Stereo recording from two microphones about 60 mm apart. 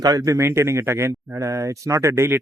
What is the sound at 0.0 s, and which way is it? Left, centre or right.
Speech, right.